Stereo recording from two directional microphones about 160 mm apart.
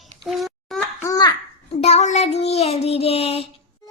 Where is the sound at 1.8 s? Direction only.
45° left (ahead or behind).